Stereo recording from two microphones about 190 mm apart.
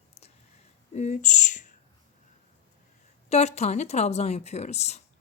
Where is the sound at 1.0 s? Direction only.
40° left (ahead or behind).